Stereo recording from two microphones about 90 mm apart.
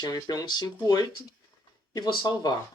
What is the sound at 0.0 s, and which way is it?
Speech, 45° left (ahead or behind).